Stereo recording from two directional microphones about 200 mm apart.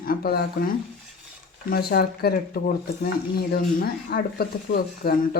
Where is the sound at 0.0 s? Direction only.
50° left (ahead or behind).